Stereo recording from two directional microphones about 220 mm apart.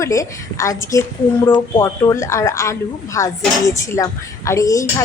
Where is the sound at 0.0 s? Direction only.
15° left (ahead or behind).